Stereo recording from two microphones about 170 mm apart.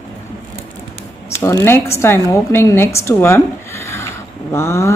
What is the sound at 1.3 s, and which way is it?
A woman's voice, 15° left (ahead or behind).